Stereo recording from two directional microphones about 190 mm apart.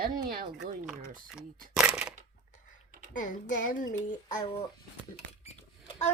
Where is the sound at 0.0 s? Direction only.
50° right (ahead or behind).